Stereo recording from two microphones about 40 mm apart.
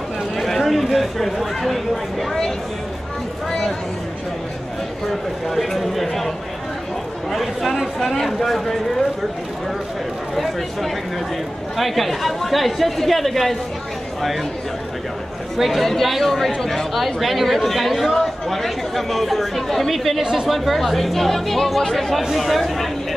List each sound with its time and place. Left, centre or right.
0.4 s a sound: centre
5.5 s speech: centre
7.3 s speech: centre
10.3 s speech: centre
15.5 s speech: centre